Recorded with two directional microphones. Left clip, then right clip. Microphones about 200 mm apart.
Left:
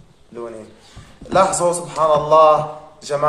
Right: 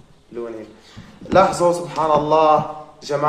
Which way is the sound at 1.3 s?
5° left (ahead or behind).